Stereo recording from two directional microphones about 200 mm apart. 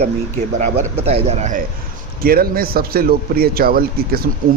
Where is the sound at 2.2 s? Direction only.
50° right (ahead or behind).